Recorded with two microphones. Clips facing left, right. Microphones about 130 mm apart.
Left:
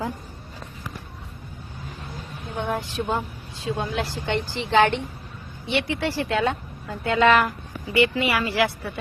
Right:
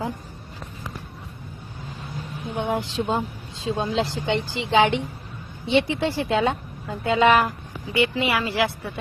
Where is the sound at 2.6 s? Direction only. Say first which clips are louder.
Right 2 dB; 20° right (ahead or behind).